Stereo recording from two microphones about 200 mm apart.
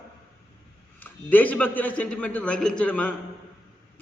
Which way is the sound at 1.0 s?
10° left (ahead or behind).